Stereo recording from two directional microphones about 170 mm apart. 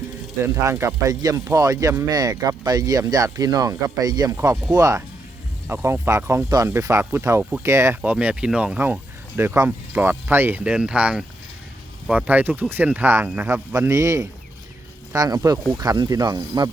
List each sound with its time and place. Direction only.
0.4 s speech: 15° right (ahead or behind)